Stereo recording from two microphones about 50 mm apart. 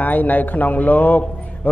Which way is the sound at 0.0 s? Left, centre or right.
Left.